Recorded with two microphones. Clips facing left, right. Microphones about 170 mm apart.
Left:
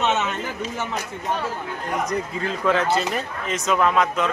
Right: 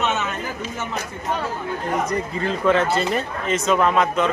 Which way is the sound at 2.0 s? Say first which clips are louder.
Right 2 dB; centre (ahead or behind).